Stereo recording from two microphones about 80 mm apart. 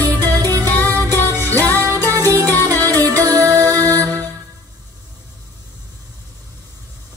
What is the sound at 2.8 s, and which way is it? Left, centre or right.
Music, left.